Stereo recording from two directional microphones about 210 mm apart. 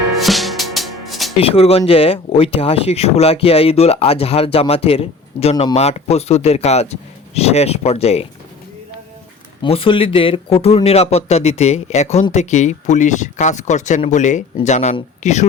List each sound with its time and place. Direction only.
0.2 s music: centre (ahead or behind)
1.4 s speech: 30° left (ahead or behind)
9.6 s speech: 25° left (ahead or behind)